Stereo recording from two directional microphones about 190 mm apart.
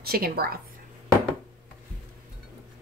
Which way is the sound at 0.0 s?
55° right (ahead or behind).